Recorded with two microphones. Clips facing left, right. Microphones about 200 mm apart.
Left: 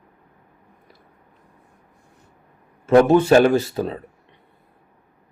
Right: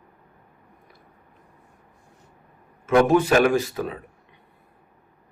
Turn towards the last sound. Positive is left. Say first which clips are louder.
# left 3 dB
turn(degrees=30)  # may be behind; listen again after turning